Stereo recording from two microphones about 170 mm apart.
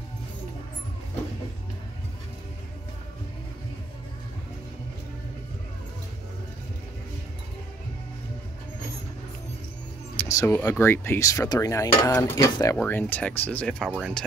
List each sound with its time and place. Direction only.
10.1 s speech: 15° left (ahead or behind)
12.0 s dishes: 20° left (ahead or behind)
12.8 s speech: 10° left (ahead or behind)
13.8 s speech: 5° right (ahead or behind)